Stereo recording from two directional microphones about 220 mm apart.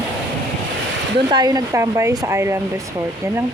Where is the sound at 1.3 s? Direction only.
20° right (ahead or behind).